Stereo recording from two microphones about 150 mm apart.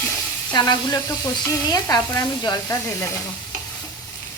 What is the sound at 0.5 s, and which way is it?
Speech, 25° left (ahead or behind).